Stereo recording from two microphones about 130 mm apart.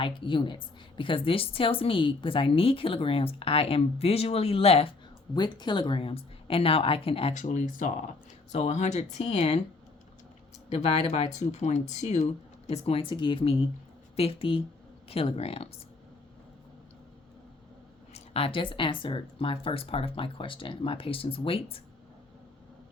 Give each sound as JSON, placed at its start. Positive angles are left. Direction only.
{"t": 0.0, "sound": "a woman's voice", "side_deg": 40}
{"t": 5.3, "sound": "a woman's voice", "side_deg": 35}
{"t": 7.3, "sound": "speech", "side_deg": 70}
{"t": 8.5, "sound": "speech", "side_deg": 60}
{"t": 10.7, "sound": "a woman's voice", "side_deg": 50}
{"t": 18.1, "sound": "a woman's voice", "side_deg": 45}